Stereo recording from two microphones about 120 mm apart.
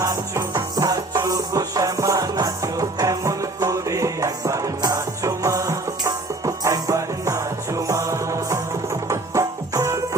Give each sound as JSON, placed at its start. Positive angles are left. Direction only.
{"t": 0.0, "sound": "music", "side_deg": -30}